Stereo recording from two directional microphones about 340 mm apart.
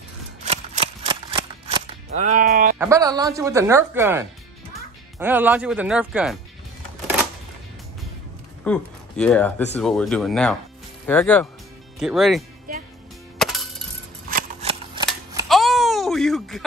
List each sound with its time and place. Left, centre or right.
0.4 s cap gun: centre
2.8 s speech: centre
8.6 s speech: centre
12.7 s music: right
13.4 s music: centre
14.3 s scissors: centre
15.0 s cap gun: centre